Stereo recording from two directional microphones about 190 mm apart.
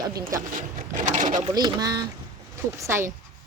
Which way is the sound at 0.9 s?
40° right (ahead or behind).